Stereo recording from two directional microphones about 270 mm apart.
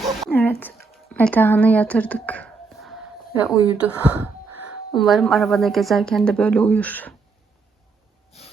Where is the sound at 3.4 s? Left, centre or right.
Centre.